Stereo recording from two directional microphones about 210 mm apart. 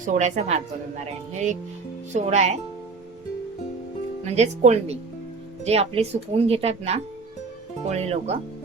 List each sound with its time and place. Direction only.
0.0 s speech: 35° right (ahead or behind)
4.3 s speech: 30° right (ahead or behind)